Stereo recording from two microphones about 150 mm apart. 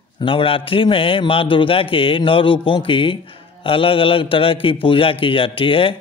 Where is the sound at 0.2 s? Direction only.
35° left (ahead or behind).